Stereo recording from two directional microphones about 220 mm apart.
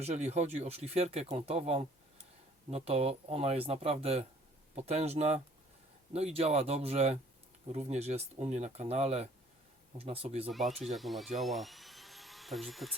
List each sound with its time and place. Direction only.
0.0 s speech: 30° right (ahead or behind)
10.9 s speech: centre (ahead or behind)
11.3 s dental drill: centre (ahead or behind)